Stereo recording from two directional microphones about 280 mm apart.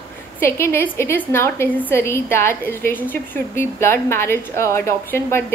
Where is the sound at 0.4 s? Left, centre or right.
Centre.